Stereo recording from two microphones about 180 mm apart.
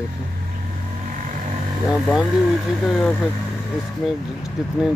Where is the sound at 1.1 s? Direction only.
45° right (ahead or behind).